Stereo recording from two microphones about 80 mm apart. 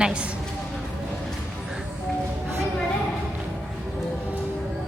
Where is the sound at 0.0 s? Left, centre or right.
Centre.